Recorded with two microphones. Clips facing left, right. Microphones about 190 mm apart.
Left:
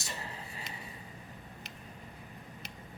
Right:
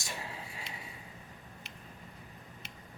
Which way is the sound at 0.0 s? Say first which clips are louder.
Even; 10° right (ahead or behind).